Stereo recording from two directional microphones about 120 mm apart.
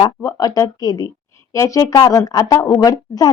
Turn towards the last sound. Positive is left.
turn(degrees=35)  # may be behind; listen again after turning